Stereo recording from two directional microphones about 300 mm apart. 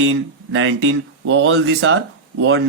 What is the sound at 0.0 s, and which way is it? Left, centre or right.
Speech, right.